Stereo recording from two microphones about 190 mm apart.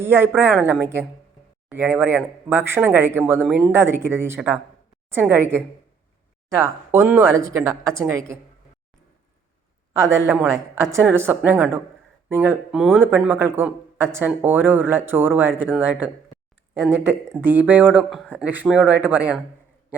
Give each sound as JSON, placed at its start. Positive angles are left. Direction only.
{"t": 0.0, "sound": "speech", "side_deg": -10}
{"t": 10.2, "sound": "speech", "side_deg": -15}